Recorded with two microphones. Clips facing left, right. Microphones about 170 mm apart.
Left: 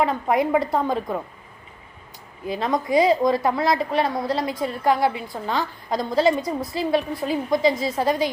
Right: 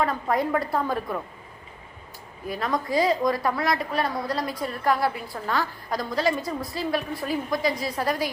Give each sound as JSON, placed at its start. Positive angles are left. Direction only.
{"t": 0.0, "sound": "a woman's voice", "side_deg": 20}
{"t": 2.5, "sound": "a woman's voice", "side_deg": 25}